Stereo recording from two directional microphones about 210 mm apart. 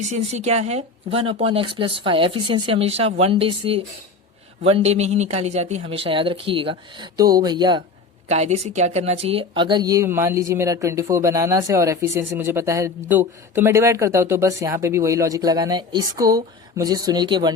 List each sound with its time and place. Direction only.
0.0 s speech: 30° right (ahead or behind)
8.3 s speech: 30° right (ahead or behind)